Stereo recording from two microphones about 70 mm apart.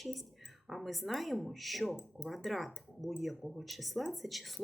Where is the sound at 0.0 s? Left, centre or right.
Centre.